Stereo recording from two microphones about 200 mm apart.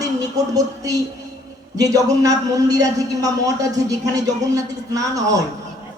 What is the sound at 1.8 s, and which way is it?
A man's voice, 15° right (ahead or behind).